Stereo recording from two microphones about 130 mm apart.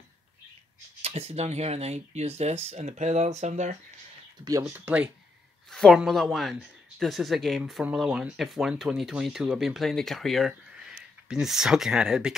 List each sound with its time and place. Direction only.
1.0 s speech: 50° right (ahead or behind)
4.5 s speech: 25° right (ahead or behind)
4.7 s speech: 10° right (ahead or behind)
5.7 s speech: 5° left (ahead or behind)